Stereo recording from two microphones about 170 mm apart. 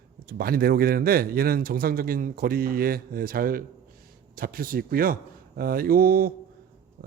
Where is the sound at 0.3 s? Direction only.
60° right (ahead or behind).